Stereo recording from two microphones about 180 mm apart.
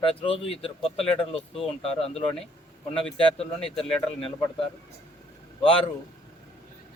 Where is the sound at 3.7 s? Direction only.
5° left (ahead or behind).